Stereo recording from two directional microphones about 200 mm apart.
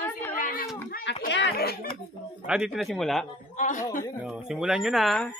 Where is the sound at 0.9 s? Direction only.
55° left (ahead or behind).